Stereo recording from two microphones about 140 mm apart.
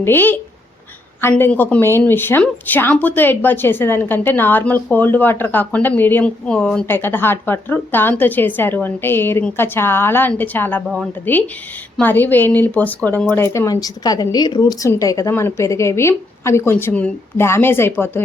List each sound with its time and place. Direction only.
0.0 s a woman's voice: 15° left (ahead or behind)
11.9 s a woman's voice: 15° left (ahead or behind)